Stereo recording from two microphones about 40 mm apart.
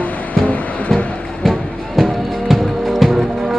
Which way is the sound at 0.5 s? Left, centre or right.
Left.